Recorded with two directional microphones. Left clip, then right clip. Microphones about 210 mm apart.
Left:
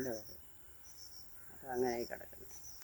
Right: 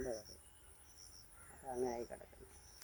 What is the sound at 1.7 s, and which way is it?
Speech, 45° left (ahead or behind).